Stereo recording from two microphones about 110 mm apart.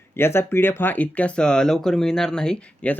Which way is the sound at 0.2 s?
20° left (ahead or behind).